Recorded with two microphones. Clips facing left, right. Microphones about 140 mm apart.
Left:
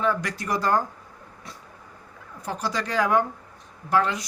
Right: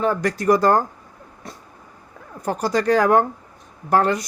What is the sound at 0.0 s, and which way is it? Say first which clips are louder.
Speech: right 6 dB; 40° right (ahead or behind).